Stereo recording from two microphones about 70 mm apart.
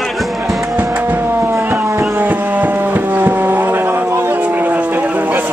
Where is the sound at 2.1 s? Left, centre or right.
Right.